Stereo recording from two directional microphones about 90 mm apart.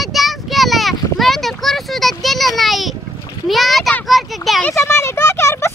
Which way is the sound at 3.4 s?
Centre (ahead or behind).